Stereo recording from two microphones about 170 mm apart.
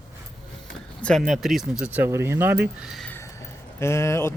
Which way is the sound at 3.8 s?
15° left (ahead or behind).